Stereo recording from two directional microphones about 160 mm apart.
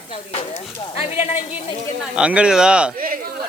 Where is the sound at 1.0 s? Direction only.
40° left (ahead or behind).